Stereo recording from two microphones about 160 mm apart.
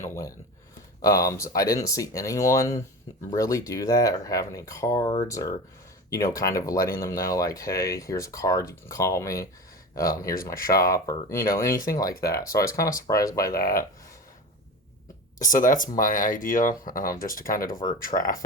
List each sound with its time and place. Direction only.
0.0 s speech: 20° left (ahead or behind)
10.3 s speech: 65° left (ahead or behind)
10.8 s speech: 20° left (ahead or behind)
11.3 s speech: 65° left (ahead or behind)
11.6 s speech: 20° left (ahead or behind)
13.5 s speech: 65° left (ahead or behind)
15.4 s speech: 55° left (ahead or behind)